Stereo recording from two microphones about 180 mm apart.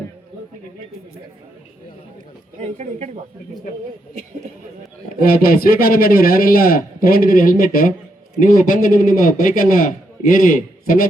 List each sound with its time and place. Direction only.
2.6 s speech: 40° right (ahead or behind)
5.2 s a man's voice: 55° left (ahead or behind)